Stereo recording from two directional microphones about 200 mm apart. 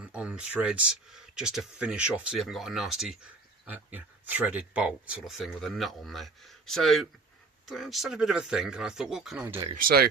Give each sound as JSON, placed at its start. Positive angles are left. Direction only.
{"t": 0.0, "sound": "speech", "side_deg": -5}
{"t": 9.7, "sound": "speech", "side_deg": -50}